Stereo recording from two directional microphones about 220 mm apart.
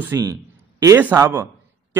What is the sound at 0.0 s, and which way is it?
A man's voice, 15° right (ahead or behind).